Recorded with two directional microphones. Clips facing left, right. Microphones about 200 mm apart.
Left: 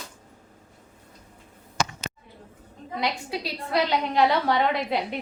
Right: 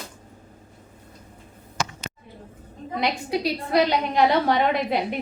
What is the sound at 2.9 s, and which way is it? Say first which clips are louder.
A woman's voice: right 4 dB; 15° right (ahead or behind).